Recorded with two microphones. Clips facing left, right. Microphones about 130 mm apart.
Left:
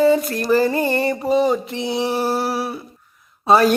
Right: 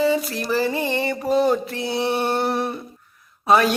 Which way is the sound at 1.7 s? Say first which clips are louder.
Left 2 dB; 25° left (ahead or behind).